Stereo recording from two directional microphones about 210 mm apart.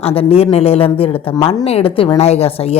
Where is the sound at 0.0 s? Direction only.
30° left (ahead or behind).